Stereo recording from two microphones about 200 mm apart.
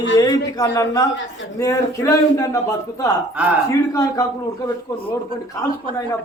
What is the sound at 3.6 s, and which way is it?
Speech, 15° left (ahead or behind).